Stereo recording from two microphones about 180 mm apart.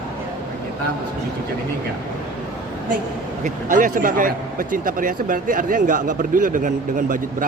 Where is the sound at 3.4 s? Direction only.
45° right (ahead or behind).